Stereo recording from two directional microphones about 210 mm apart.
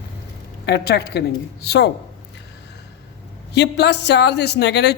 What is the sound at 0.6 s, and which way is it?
Speech, 50° left (ahead or behind).